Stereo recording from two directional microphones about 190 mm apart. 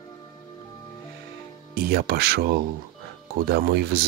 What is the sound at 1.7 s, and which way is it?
Speech, 55° right (ahead or behind).